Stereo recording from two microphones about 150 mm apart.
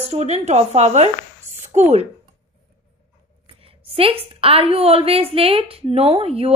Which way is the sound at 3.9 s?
40° right (ahead or behind).